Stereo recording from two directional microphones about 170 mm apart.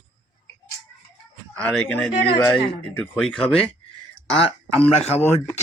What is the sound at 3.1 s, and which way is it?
Speech, 5° left (ahead or behind).